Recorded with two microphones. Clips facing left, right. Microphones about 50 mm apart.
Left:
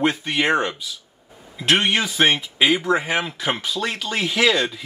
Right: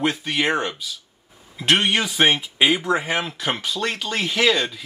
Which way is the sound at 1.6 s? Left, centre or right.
Centre.